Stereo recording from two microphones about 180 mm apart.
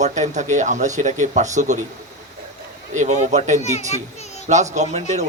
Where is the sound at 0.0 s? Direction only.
40° right (ahead or behind).